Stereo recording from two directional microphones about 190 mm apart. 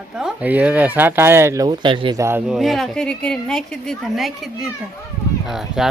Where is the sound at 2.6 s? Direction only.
Centre (ahead or behind).